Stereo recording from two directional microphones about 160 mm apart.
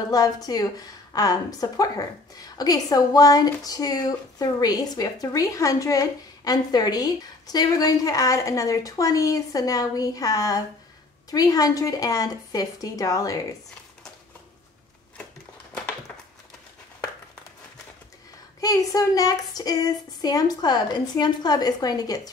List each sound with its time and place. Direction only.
0.1 s a woman's voice: 25° left (ahead or behind)
18.6 s a woman's voice: 20° left (ahead or behind)